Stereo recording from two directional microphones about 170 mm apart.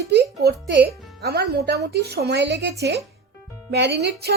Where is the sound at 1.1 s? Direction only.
70° right (ahead or behind).